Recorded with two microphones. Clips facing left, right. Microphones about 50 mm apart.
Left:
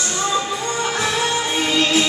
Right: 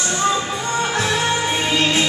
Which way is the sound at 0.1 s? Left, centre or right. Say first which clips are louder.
Right 2 dB; right.